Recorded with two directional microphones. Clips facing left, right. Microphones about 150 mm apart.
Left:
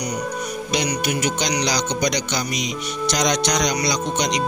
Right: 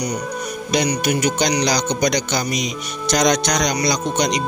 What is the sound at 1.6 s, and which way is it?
Speech, 50° right (ahead or behind).